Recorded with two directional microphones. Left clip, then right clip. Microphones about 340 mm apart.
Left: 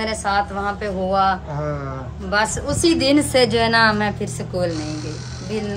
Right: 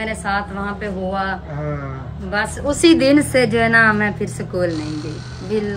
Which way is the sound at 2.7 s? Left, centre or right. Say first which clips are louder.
Right 5 dB; centre.